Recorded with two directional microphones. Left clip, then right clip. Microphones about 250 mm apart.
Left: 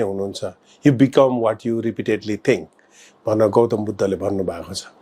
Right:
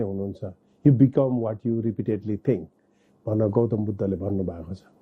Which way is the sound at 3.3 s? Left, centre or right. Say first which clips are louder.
Left 8 dB; left.